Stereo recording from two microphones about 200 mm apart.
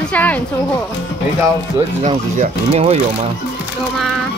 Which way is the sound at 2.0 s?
30° right (ahead or behind).